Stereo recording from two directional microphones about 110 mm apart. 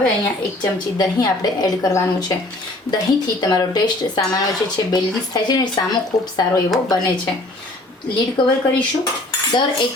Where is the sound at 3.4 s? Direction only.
40° left (ahead or behind).